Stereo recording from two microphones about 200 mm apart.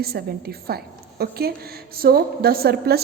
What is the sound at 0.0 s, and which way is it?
A woman's voice, 50° right (ahead or behind).